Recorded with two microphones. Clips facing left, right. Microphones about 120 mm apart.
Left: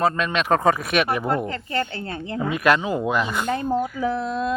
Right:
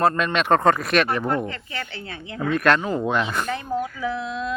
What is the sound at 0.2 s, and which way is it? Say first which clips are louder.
Speech: right 1 dB; centre (ahead or behind).